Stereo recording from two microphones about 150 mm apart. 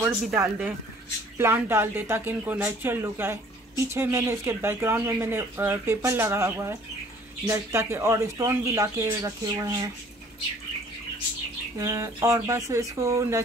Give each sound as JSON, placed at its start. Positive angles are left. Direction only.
{"t": 0.4, "sound": "speech", "side_deg": -15}
{"t": 11.8, "sound": "speech", "side_deg": -20}